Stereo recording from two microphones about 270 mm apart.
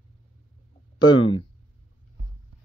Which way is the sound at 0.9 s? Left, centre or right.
Centre.